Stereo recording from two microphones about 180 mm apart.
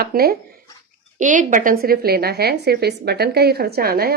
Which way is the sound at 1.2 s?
45° right (ahead or behind).